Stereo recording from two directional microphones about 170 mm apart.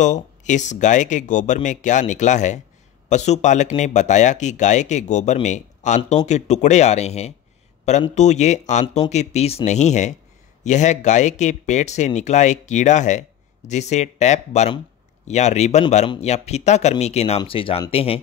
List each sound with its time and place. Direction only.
0.0 s speech: 45° left (ahead or behind)